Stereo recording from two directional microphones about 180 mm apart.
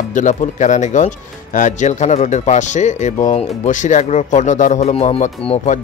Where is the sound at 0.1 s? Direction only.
45° left (ahead or behind).